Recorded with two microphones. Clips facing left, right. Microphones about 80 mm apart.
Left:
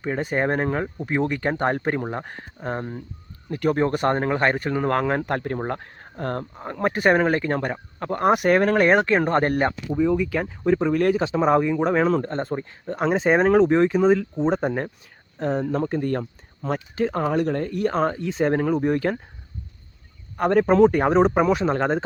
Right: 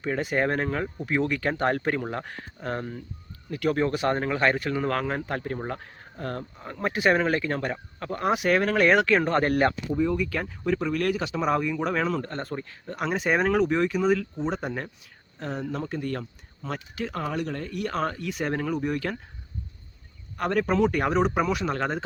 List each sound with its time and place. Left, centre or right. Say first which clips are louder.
0.2 s speech: left 3 dB; left
3.9 s speech: left 4 dB; left
9.6 s speech: left 3 dB; centre; by 19.1 s left
20.3 s speech: left 7 dB; left